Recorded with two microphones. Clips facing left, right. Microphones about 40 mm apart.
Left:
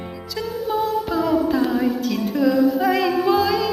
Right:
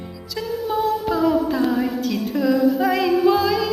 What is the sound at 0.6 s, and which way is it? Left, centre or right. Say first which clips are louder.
Music: right 1 dB; centre.